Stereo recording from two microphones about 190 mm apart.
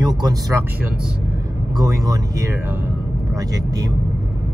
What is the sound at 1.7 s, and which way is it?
Speech, 20° right (ahead or behind).